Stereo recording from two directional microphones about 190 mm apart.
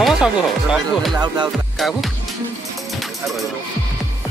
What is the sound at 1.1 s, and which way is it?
Music, 25° right (ahead or behind).